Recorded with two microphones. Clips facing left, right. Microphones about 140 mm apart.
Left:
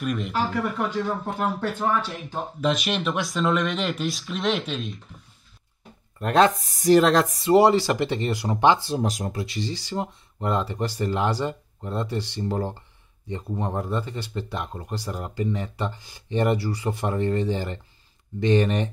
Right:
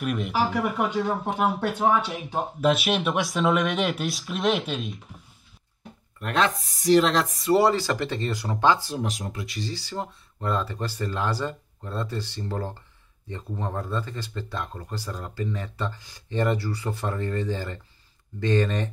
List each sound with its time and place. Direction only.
0.0 s speech: 5° right (ahead or behind)
6.1 s speech: 35° left (ahead or behind)
7.5 s speech: 15° left (ahead or behind)
8.9 s speech: 40° left (ahead or behind); by 18.9 s 20° left (ahead or behind)